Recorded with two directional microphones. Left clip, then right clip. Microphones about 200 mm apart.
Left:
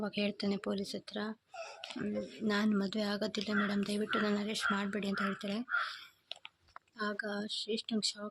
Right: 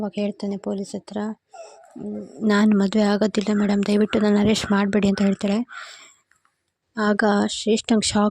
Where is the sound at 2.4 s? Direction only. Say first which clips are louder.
Right 15 dB; 45° right (ahead or behind).